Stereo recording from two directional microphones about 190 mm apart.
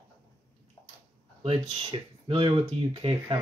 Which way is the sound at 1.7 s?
25° right (ahead or behind).